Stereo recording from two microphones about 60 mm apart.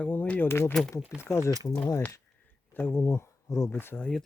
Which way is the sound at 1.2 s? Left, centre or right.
Left.